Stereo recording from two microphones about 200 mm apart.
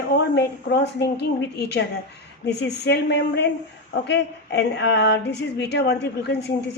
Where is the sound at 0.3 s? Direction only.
55° left (ahead or behind).